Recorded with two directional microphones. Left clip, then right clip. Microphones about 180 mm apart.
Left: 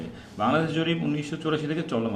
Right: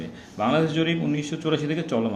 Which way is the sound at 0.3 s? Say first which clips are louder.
Right 2 dB; 25° right (ahead or behind).